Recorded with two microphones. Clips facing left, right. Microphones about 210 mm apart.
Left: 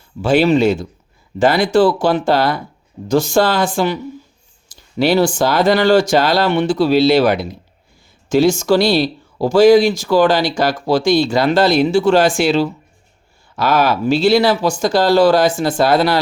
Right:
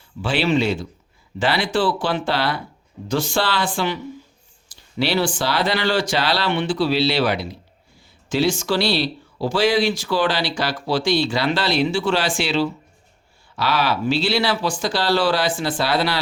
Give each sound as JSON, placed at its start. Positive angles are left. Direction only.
{"t": 0.2, "sound": "speech", "side_deg": 45}